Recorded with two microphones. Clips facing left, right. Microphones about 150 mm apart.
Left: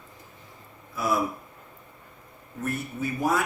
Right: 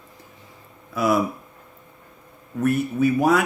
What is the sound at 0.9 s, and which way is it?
Speech, 80° right.